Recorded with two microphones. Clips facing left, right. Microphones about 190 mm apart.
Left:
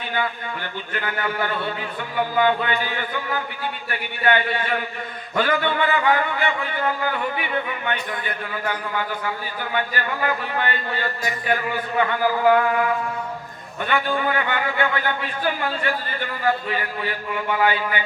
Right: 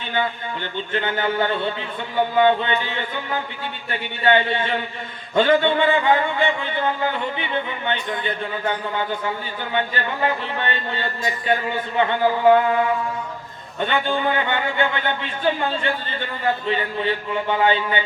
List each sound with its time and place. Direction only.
0.1 s a man's voice: 25° right (ahead or behind)